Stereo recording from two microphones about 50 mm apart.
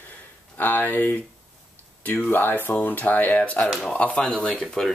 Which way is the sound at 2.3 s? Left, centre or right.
Left.